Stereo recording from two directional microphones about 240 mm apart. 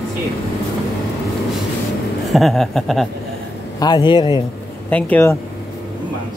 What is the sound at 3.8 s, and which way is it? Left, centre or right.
Speech, centre.